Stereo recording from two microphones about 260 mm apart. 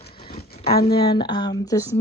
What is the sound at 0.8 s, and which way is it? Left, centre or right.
Speech, centre.